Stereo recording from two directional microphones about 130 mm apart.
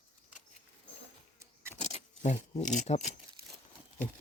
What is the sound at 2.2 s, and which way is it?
Speech, 70° left (ahead or behind).